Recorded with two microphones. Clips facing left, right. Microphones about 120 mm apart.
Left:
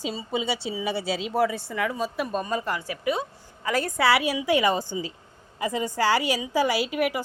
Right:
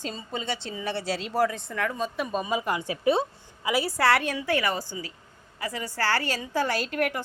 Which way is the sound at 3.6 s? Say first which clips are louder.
Left 1 dB; 10° right (ahead or behind).